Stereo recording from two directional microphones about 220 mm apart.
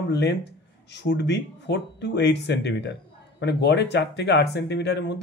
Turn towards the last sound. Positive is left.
turn(degrees=50)  # may be behind; listen again after turning